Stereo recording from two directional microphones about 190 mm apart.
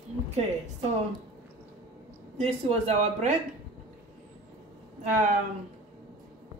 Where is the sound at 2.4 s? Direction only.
35° right (ahead or behind).